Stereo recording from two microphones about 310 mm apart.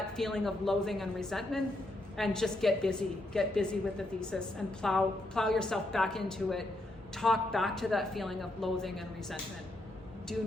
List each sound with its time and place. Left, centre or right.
0.2 s a woman's voice: centre